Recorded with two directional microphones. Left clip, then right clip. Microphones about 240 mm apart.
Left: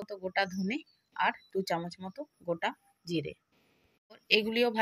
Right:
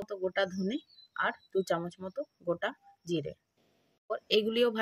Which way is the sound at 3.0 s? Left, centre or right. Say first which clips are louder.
Even; right.